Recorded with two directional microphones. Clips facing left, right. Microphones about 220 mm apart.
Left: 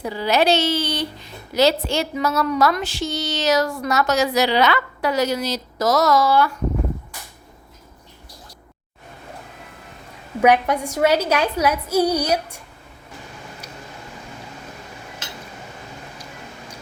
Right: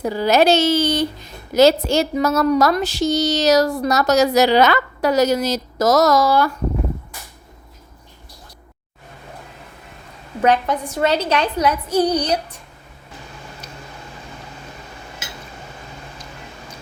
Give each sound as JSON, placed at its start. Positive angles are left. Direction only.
{"t": 0.0, "sound": "a woman's voice", "side_deg": -45}
{"t": 10.4, "sound": "a woman's voice", "side_deg": 10}